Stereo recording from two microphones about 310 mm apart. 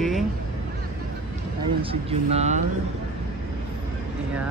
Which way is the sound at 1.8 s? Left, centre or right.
Centre.